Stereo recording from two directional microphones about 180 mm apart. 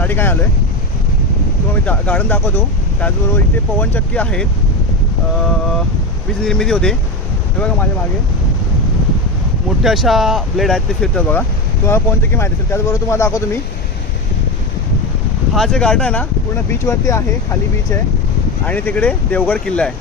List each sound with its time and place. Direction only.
0.0 s speech: 10° left (ahead or behind)
1.8 s speech: 10° left (ahead or behind)
6.4 s speech: 5° left (ahead or behind)
9.6 s speech: centre (ahead or behind); by 13.6 s 15° left (ahead or behind)
15.5 s speech: 5° left (ahead or behind)
16.7 s speech: 15° left (ahead or behind)
18.6 s speech: 10° left (ahead or behind)